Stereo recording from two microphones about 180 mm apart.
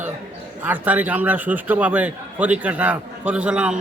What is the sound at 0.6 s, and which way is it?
A man's voice, 10° right (ahead or behind).